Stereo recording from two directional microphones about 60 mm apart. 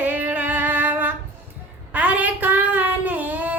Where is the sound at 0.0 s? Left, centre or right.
Right.